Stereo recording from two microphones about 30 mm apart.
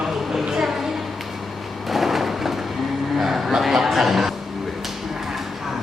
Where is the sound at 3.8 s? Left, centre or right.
Centre.